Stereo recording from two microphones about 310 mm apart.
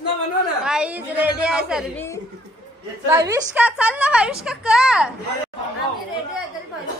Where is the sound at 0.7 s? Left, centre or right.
Centre.